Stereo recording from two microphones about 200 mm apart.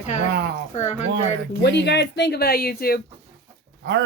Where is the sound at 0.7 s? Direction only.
35° left (ahead or behind).